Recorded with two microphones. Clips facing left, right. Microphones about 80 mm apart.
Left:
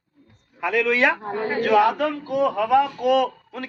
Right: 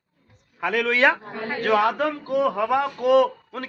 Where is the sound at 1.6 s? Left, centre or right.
Right.